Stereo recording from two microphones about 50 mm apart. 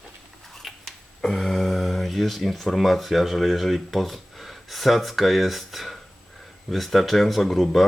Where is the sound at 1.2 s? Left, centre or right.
Centre.